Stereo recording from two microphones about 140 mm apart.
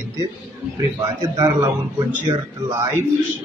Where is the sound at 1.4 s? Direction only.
25° right (ahead or behind).